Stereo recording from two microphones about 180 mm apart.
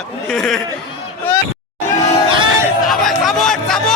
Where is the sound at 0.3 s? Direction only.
Centre (ahead or behind).